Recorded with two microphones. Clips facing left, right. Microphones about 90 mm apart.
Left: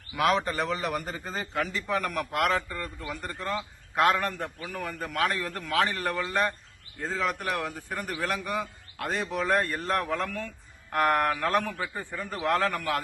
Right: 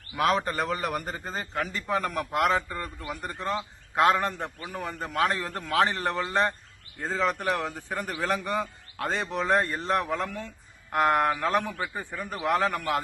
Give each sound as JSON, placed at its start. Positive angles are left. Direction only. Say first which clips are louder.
{"t": 0.2, "sound": "a man's voice", "louder": "even", "side_deg": -40}
{"t": 2.0, "sound": "a man's voice", "louder": "right 3 dB", "side_deg": 0}
{"t": 2.6, "sound": "a man's voice", "louder": "right 1 dB", "side_deg": -15}
{"t": 7.0, "sound": "a man's voice", "louder": "right 3 dB", "side_deg": 0}
{"t": 9.3, "sound": "a man's voice", "louder": "right 1 dB", "side_deg": -20}